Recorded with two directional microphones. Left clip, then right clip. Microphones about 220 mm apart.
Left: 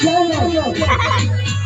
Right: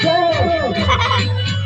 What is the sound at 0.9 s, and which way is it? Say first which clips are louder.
Music: right 3 dB; 5° right (ahead or behind).